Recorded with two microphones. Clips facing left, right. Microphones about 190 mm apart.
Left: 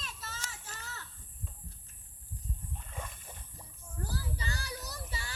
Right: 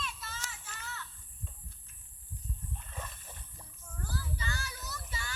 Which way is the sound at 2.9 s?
10° left (ahead or behind).